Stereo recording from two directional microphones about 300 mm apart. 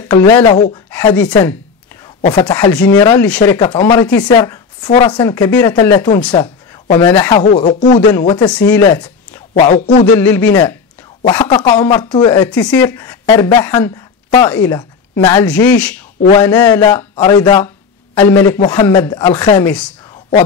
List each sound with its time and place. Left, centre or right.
0.1 s speech: centre
9.5 s speech: left
10.1 s speech: centre